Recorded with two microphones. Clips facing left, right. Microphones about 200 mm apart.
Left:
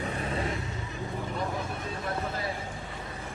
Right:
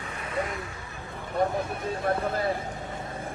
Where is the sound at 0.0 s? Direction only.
35° left (ahead or behind).